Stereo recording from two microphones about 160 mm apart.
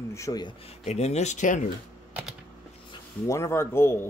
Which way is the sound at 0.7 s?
45° left (ahead or behind).